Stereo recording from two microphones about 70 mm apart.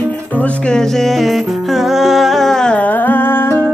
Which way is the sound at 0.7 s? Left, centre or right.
Centre.